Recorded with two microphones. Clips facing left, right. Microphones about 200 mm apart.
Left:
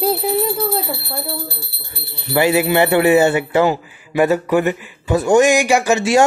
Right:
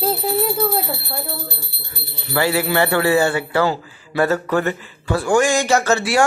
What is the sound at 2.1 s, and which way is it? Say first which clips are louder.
Speech: left 4 dB; 20° left (ahead or behind).